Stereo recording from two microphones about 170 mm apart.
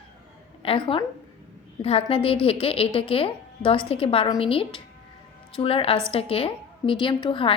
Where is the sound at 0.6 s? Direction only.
30° left (ahead or behind).